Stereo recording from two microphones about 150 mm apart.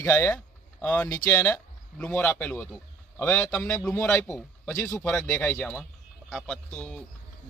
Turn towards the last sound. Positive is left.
turn(degrees=5)  # may be behind; listen again after turning